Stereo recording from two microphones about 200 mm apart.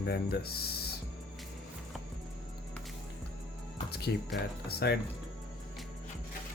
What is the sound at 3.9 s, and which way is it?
Speech, 50° left (ahead or behind).